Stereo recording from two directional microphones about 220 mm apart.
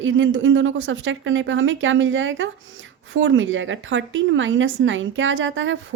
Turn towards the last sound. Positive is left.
turn(degrees=-60)  # may be behind; listen again after turning